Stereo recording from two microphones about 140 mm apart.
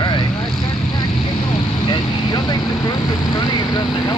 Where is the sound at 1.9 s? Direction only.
30° left (ahead or behind).